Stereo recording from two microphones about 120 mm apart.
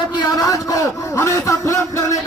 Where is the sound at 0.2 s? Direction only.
35° left (ahead or behind).